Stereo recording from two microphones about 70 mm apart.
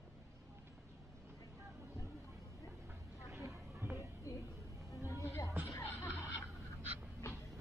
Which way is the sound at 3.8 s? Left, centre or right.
Right.